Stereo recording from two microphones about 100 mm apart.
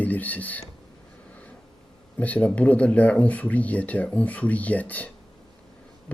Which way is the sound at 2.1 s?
15° left (ahead or behind).